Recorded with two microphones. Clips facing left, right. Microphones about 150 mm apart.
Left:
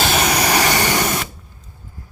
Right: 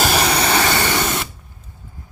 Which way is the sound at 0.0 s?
Centre (ahead or behind).